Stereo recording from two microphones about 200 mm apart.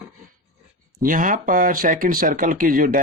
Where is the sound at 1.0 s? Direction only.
45° right (ahead or behind).